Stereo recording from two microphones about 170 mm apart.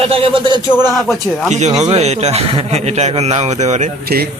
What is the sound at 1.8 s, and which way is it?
A man's voice, 40° right (ahead or behind).